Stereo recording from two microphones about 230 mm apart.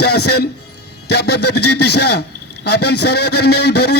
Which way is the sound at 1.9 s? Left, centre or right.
Left.